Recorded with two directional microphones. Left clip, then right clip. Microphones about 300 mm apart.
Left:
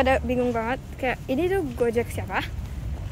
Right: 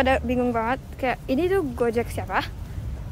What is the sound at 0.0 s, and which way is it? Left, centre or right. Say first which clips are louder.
Speech: even; centre.